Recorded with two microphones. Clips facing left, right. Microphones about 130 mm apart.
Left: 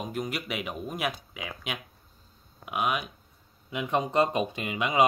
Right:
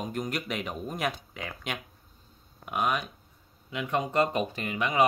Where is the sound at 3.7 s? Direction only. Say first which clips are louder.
Left 2 dB; 20° left (ahead or behind).